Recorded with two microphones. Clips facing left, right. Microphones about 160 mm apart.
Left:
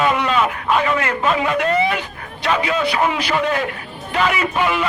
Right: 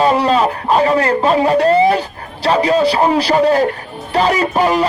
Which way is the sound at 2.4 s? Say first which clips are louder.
Right 7 dB; 35° right (ahead or behind).